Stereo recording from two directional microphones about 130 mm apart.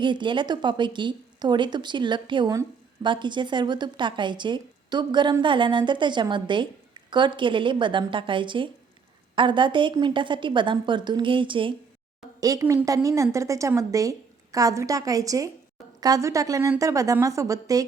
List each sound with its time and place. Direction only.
0.0 s speech: 40° right (ahead or behind)
12.4 s a woman's voice: 25° right (ahead or behind)